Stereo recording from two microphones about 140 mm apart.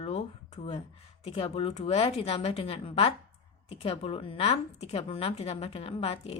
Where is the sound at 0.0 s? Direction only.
45° left (ahead or behind).